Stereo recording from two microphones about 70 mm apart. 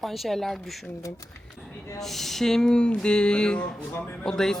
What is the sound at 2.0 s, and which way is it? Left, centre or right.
A man's voice, centre.